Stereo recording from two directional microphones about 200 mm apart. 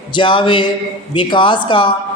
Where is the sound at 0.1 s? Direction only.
25° left (ahead or behind).